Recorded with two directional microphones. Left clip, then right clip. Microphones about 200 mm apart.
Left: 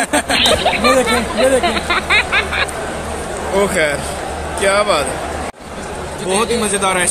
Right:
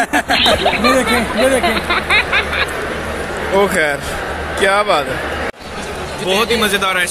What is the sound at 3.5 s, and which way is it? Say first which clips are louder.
A man's voice: right 1 dB; 20° right (ahead or behind).